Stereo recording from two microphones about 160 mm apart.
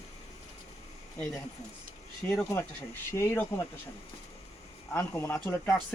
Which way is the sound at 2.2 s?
15° left (ahead or behind).